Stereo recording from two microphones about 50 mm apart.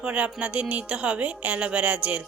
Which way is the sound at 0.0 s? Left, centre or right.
Right.